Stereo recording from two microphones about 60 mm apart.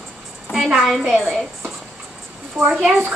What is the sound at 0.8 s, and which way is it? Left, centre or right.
Speech, centre.